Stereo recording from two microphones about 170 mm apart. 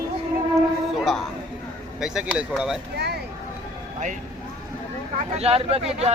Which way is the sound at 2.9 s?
70° right (ahead or behind).